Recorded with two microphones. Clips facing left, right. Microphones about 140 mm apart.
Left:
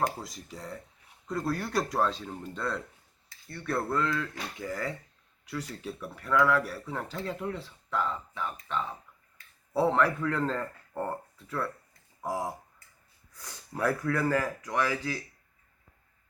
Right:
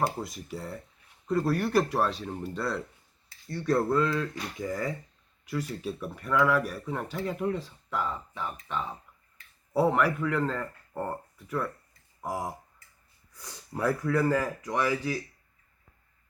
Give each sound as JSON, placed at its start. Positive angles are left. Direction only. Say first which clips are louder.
{"t": 0.5, "sound": "speech", "louder": "right 1 dB", "side_deg": -10}